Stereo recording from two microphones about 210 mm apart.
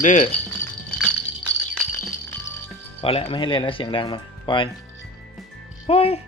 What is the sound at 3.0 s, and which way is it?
Speech, 25° left (ahead or behind).